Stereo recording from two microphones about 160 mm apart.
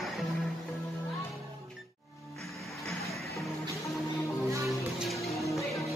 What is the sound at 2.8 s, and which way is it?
Music, centre (ahead or behind).